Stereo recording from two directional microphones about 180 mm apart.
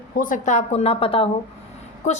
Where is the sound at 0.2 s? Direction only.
45° left (ahead or behind).